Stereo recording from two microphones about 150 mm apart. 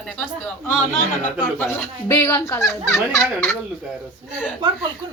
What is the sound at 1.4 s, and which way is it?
Speech, 15° left (ahead or behind).